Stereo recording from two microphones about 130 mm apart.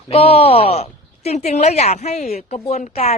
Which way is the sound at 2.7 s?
70° left (ahead or behind).